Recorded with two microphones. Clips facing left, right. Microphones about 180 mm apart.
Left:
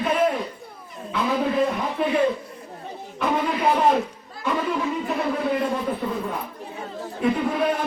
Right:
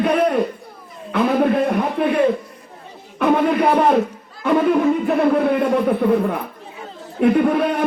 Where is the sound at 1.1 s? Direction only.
60° right (ahead or behind).